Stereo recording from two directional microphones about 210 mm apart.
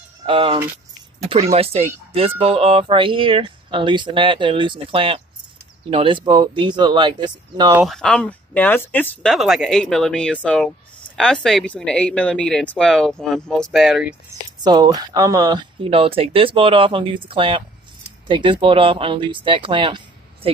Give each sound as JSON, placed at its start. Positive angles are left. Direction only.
{"t": 0.2, "sound": "speech", "side_deg": -25}
{"t": 7.7, "sound": "speech", "side_deg": 0}
{"t": 14.6, "sound": "a woman's voice", "side_deg": -20}